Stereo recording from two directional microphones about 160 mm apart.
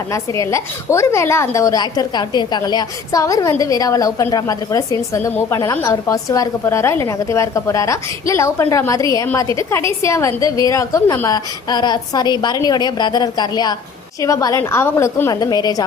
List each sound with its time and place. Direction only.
0.1 s a woman's voice: 20° left (ahead or behind)